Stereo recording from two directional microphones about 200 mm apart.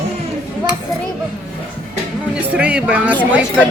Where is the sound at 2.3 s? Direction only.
5° right (ahead or behind).